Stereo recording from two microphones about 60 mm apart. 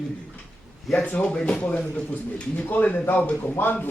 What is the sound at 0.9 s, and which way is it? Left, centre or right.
Speech, left.